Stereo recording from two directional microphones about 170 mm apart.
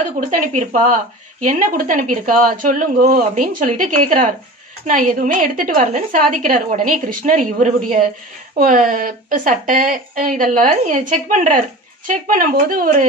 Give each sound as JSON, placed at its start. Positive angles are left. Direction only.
{"t": 0.2, "sound": "speech", "side_deg": -40}